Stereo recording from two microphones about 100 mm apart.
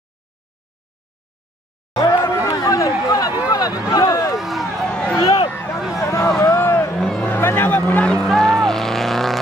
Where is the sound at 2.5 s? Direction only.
35° left (ahead or behind).